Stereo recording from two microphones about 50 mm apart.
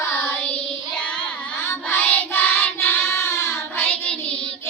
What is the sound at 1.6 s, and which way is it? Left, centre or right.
Music, left.